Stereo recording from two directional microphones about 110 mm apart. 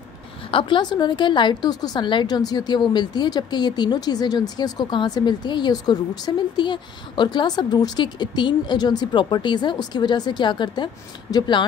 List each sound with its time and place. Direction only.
0.5 s a woman's voice: 50° left (ahead or behind)